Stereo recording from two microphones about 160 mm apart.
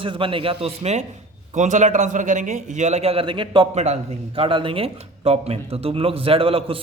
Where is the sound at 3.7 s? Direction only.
45° right (ahead or behind).